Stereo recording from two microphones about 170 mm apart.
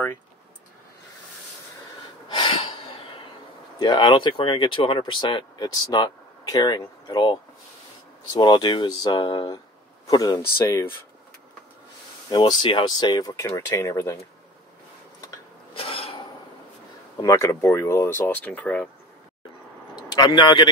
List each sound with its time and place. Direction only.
2.2 s a sound: 30° left (ahead or behind)
3.8 s speech: 25° left (ahead or behind)
12.3 s speech: 25° left (ahead or behind)
15.7 s a sound: 35° left (ahead or behind)
17.2 s speech: 15° left (ahead or behind)
20.1 s speech: 25° left (ahead or behind)